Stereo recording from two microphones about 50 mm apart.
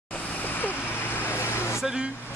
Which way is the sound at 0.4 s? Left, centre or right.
Left.